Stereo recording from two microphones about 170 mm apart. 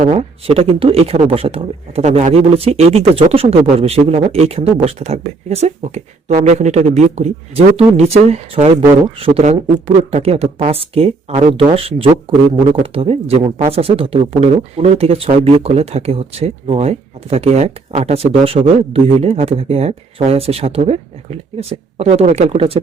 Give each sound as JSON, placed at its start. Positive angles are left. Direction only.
{"t": 0.2, "sound": "speech", "side_deg": -35}